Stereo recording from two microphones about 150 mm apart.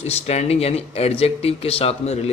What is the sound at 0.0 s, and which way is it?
Speech, 45° left (ahead or behind).